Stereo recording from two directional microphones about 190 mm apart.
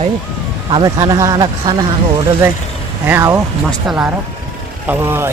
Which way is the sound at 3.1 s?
15° right (ahead or behind).